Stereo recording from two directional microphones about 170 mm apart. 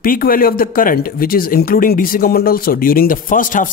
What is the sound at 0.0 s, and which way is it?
Speech, 60° left (ahead or behind).